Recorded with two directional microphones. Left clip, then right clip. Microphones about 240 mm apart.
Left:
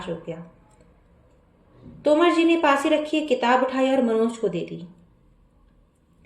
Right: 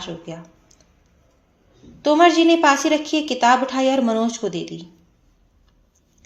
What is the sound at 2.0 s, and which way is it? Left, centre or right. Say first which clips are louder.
A woman's voice: right 4 dB; right.